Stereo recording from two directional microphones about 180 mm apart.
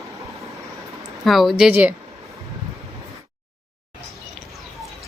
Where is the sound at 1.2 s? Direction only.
Centre (ahead or behind).